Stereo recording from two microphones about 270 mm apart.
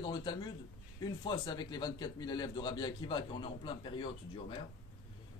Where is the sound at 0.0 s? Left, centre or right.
Centre.